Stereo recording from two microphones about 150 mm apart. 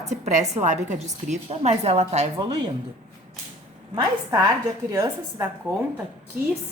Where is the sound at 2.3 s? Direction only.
30° right (ahead or behind).